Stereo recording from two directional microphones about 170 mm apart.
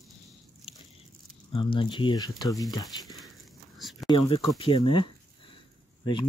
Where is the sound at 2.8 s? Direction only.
Centre (ahead or behind).